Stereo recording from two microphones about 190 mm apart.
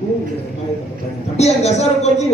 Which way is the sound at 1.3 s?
35° left (ahead or behind).